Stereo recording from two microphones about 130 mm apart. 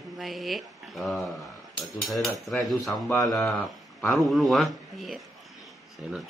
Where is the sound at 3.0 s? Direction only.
20° left (ahead or behind).